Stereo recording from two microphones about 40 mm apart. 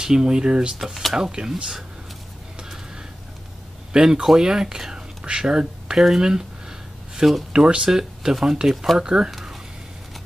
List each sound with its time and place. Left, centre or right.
0.0 s speech: centre
3.9 s speech: centre
8.0 s speech: centre